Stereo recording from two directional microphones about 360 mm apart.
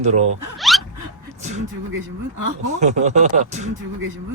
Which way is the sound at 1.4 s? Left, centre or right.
Centre.